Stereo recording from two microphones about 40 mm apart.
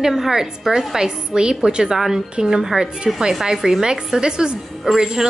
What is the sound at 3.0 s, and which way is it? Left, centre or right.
A woman's voice, centre.